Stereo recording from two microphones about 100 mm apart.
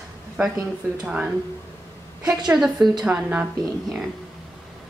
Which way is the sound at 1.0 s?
10° right (ahead or behind).